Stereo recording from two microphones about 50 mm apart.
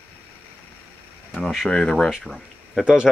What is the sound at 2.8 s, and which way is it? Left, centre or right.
Speech, centre.